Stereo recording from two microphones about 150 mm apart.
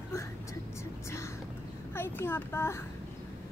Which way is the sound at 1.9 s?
15° left (ahead or behind).